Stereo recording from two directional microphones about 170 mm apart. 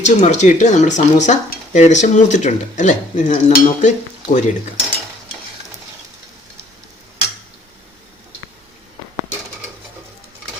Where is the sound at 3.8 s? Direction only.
45° left (ahead or behind).